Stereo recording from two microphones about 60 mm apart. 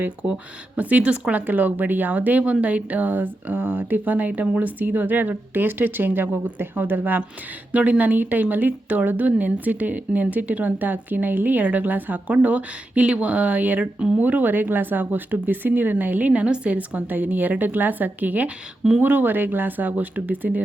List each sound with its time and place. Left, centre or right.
0.8 s speech: right
4.8 s a woman's voice: right